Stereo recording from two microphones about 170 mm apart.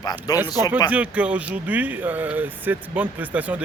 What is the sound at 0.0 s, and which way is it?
Speech, 25° left (ahead or behind).